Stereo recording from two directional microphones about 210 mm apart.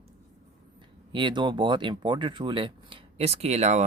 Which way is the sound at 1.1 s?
20° right (ahead or behind).